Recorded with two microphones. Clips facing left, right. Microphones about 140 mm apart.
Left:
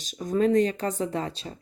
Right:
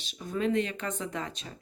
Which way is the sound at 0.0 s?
40° left (ahead or behind).